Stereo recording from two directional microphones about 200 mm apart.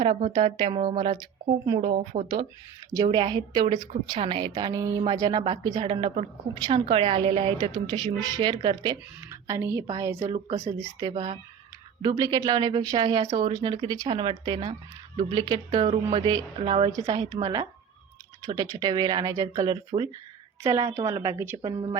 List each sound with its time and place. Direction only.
0.3 s a woman's voice: 25° right (ahead or behind)
1.9 s speech: 35° right (ahead or behind)
2.9 s a woman's voice: 20° right (ahead or behind)